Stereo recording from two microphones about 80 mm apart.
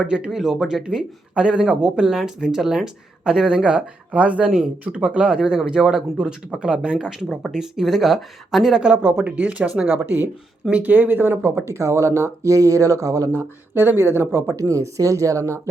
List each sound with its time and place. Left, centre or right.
0.1 s speech: centre; by 13.4 s right
13.7 s speech: right
14.5 s speech: right